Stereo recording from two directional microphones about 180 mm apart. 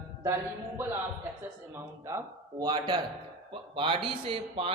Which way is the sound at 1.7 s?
15° right (ahead or behind).